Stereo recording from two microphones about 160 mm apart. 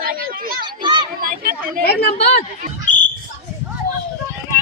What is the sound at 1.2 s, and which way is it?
Chatter, 60° right (ahead or behind).